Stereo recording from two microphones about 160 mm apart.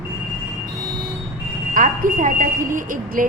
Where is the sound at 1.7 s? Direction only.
60° right (ahead or behind).